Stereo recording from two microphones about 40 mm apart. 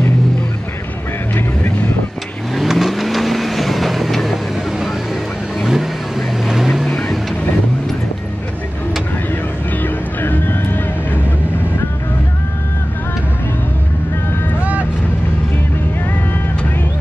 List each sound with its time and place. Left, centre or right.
1.3 s vehicle: left
2.5 s vehicle: centre
5.7 s vehicle: centre
9.7 s music: left
14.6 s vehicle: right